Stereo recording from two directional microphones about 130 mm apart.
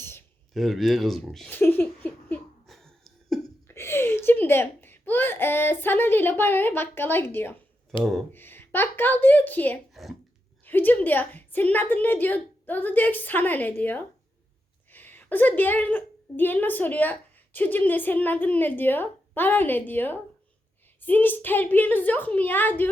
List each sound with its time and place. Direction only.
0.0 s a sound: 20° left (ahead or behind)
0.5 s speech: centre (ahead or behind)
1.5 s laughter: 15° left (ahead or behind)
2.6 s cough: centre (ahead or behind)
3.7 s a child's voice: 20° left (ahead or behind)
7.9 s speech: centre (ahead or behind)
8.3 s a woman's voice: 15° left (ahead or behind)
9.9 s a sound: centre (ahead or behind)
10.7 s a woman's voice: 15° left (ahead or behind)